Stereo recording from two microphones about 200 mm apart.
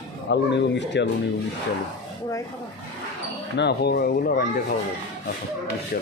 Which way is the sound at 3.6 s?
55° left (ahead or behind).